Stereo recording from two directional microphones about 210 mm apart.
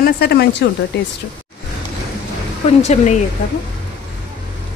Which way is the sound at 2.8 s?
35° left (ahead or behind).